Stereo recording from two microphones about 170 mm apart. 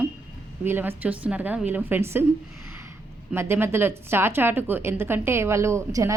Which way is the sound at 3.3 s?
15° right (ahead or behind).